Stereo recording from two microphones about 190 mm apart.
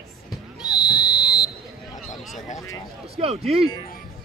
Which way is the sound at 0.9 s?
20° left (ahead or behind).